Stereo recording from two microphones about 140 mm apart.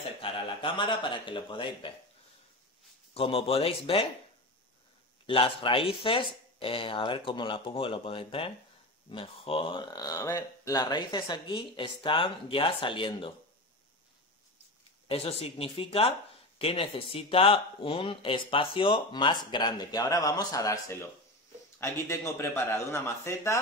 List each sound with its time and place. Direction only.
0.2 s speech: 35° left (ahead or behind)
3.2 s speech: 40° left (ahead or behind)
5.2 s speech: 40° left (ahead or behind)
15.0 s a man's voice: 45° left (ahead or behind); by 23.6 s 20° left (ahead or behind)